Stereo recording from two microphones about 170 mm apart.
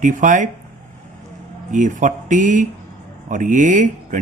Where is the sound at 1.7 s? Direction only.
50° right (ahead or behind).